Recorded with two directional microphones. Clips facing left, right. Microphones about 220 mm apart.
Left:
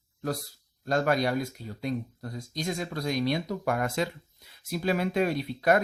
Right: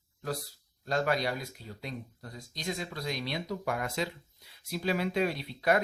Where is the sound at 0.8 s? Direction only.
50° left (ahead or behind).